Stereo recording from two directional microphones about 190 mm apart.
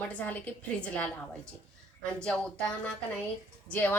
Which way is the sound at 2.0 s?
5° left (ahead or behind).